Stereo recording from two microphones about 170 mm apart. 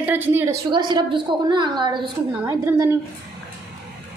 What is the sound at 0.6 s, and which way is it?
A woman's voice, 25° right (ahead or behind).